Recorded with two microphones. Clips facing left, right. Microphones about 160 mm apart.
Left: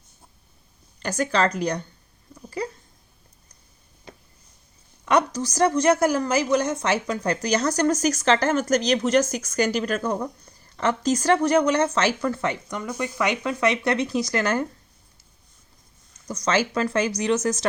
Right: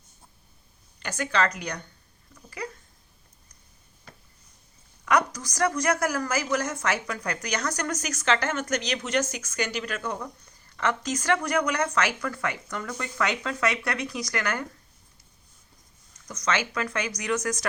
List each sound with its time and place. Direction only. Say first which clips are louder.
0.9 s speech: left 4 dB; 35° left (ahead or behind)
2.6 s a sound: left 6 dB; 30° left (ahead or behind)
5.0 s speech: left 4 dB; 30° left (ahead or behind)
16.3 s speech: left 5 dB; 30° left (ahead or behind)